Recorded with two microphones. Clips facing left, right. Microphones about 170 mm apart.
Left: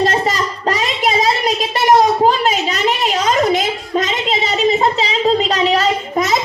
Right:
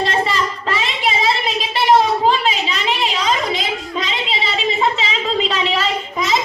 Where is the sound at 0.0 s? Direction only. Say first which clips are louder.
Left 3 dB; 40° left (ahead or behind).